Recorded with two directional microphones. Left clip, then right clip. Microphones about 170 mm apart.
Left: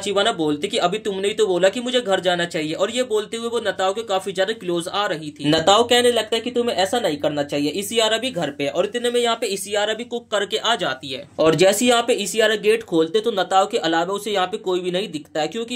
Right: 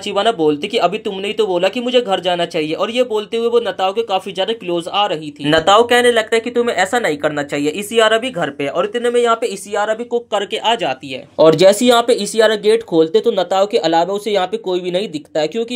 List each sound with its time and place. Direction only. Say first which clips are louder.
0.1 s speech: right 5 dB; 10° right (ahead or behind)